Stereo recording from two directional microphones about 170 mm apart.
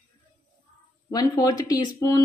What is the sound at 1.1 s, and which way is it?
Speech, 20° left (ahead or behind).